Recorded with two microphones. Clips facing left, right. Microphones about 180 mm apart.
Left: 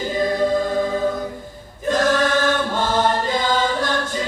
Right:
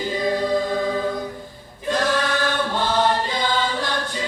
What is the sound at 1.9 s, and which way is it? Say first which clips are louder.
Choir: left 4 dB; 45° left (ahead or behind).